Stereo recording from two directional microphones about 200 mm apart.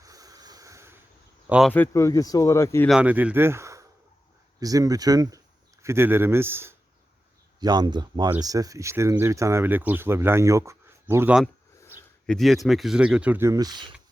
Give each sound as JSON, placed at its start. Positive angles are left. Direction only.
{"t": 0.0, "sound": "a sound", "side_deg": -15}
{"t": 1.5, "sound": "speech", "side_deg": -5}
{"t": 1.7, "sound": "speech", "side_deg": 10}
{"t": 2.9, "sound": "speech", "side_deg": -5}
{"t": 11.8, "sound": "a sound", "side_deg": 15}
{"t": 12.2, "sound": "speech", "side_deg": 0}